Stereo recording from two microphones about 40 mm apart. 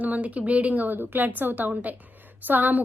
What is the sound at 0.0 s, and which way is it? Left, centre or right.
A woman's voice, right.